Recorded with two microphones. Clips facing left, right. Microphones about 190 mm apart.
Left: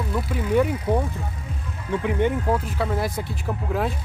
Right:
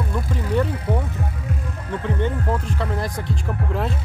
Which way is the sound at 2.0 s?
15° left (ahead or behind).